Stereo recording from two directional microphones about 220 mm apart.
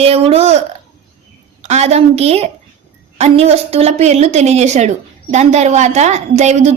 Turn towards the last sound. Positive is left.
turn(degrees=-30)  # may be behind; listen again after turning